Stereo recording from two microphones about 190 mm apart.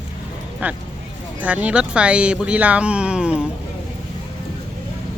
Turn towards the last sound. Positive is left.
turn(degrees=-5)  # may be behind; listen again after turning